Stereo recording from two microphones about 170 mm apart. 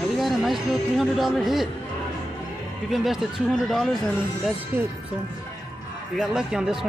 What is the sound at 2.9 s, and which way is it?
Speech, centre (ahead or behind).